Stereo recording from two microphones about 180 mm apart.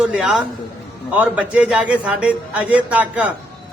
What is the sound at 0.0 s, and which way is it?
A man's voice, 5° right (ahead or behind).